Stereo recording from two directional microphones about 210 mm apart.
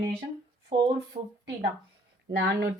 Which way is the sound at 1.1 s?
35° right (ahead or behind).